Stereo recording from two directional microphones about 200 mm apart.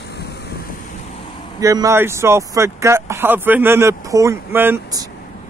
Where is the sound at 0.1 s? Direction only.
55° left (ahead or behind).